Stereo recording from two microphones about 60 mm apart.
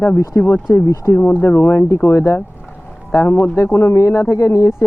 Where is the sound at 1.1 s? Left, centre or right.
Left.